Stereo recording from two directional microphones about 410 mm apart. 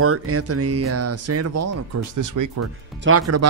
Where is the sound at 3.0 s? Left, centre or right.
Right.